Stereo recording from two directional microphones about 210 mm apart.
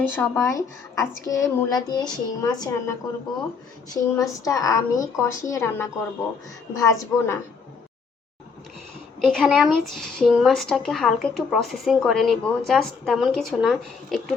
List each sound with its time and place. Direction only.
0.0 s a woman's voice: 10° left (ahead or behind)
9.2 s a woman's voice: centre (ahead or behind)